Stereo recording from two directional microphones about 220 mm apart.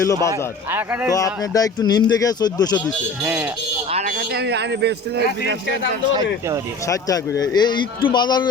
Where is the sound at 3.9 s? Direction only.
30° right (ahead or behind).